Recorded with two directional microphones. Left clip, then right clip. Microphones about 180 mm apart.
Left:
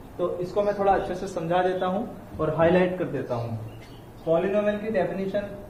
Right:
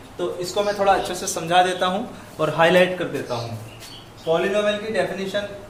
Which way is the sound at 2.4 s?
50° right (ahead or behind).